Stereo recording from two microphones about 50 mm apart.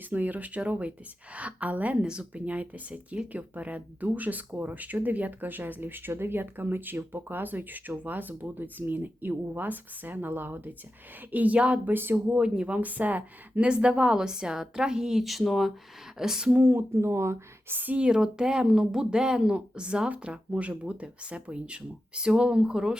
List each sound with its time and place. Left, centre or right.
0.1 s speech: right
2.0 s speech: centre
11.9 s speech: right
12.4 s speech: centre
12.8 s speech: right
13.7 s a woman's voice: centre
16.5 s speech: right
16.9 s speech: right
17.7 s speech: right
17.9 s speech: centre